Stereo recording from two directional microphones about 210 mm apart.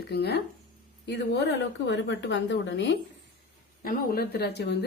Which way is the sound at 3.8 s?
45° left (ahead or behind).